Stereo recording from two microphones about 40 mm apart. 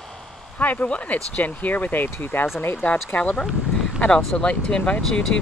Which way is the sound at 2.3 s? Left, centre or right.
Left.